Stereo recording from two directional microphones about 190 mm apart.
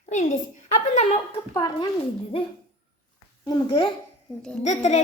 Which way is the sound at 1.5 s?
20° left (ahead or behind).